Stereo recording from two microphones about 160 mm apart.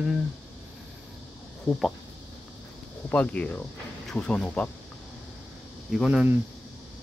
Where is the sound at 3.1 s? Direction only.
10° left (ahead or behind).